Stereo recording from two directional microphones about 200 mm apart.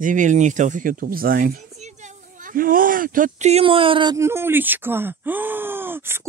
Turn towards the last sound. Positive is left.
turn(degrees=-10)  # may be behind; listen again after turning